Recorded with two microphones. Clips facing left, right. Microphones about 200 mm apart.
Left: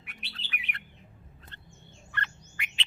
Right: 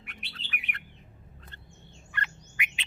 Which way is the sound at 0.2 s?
50° right (ahead or behind).